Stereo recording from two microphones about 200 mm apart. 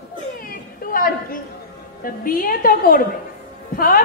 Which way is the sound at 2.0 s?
45° left (ahead or behind).